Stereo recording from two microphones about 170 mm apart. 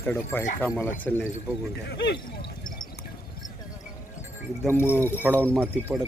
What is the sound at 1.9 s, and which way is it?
Speech, 80° left.